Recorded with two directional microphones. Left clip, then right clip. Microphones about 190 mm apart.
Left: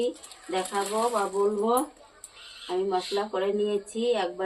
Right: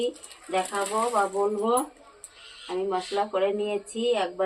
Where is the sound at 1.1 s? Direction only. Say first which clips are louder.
Right 1 dB; 10° right (ahead or behind).